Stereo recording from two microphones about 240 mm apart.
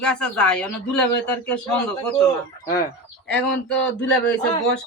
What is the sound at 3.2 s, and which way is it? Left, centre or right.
Speech, centre.